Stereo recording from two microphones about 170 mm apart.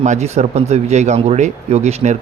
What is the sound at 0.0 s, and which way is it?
Speech, 40° right (ahead or behind).